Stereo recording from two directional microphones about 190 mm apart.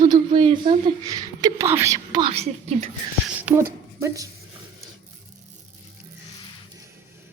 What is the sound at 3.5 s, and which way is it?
Speech, 5° right (ahead or behind).